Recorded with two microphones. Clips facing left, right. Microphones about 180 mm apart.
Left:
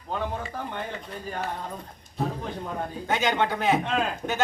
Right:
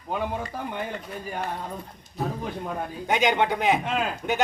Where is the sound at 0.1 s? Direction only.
10° right (ahead or behind).